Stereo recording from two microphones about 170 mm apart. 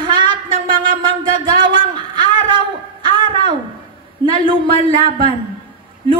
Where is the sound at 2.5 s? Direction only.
30° right (ahead or behind).